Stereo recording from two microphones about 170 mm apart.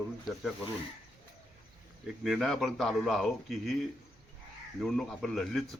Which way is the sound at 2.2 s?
Centre (ahead or behind).